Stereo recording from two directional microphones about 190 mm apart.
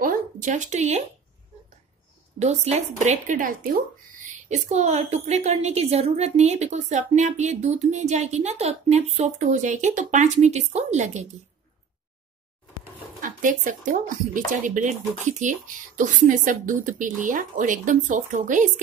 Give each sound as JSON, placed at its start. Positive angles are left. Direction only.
{"t": 0.0, "sound": "a sound", "side_deg": -45}
{"t": 2.3, "sound": "a woman's voice", "side_deg": -35}
{"t": 13.2, "sound": "speech", "side_deg": -45}